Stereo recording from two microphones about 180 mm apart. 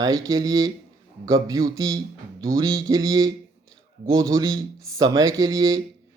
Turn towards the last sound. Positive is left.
turn(degrees=-20)  # may be behind; listen again after turning